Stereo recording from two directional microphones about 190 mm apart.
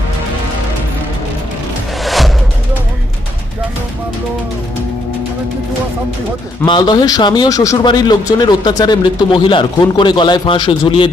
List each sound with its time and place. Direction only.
2.0 s music: centre (ahead or behind)
6.7 s speech: 25° left (ahead or behind)